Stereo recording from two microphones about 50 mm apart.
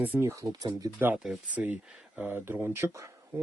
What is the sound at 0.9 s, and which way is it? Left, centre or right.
Speech, right.